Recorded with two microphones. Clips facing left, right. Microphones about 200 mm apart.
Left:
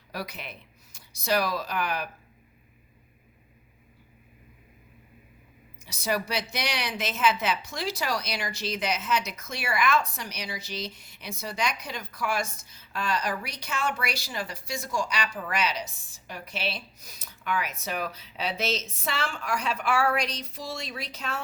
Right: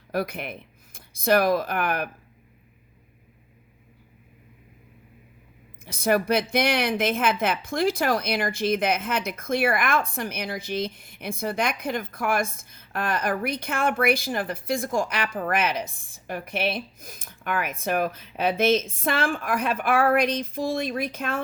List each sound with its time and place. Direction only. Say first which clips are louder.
0.1 s speech: right 9 dB; 55° right (ahead or behind)
5.8 s a woman's voice: right 7 dB; 55° right (ahead or behind)